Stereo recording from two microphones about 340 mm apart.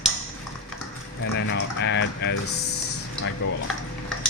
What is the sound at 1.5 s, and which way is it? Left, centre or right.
Speech, left.